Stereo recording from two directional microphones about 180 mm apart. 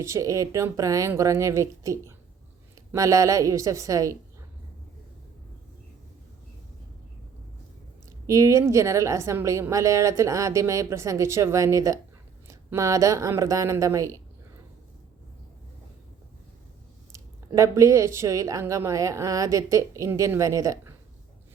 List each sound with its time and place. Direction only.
0.0 s a woman's voice: 15° right (ahead or behind)
8.3 s a woman's voice: 15° right (ahead or behind)
17.1 s a woman's voice: 15° right (ahead or behind)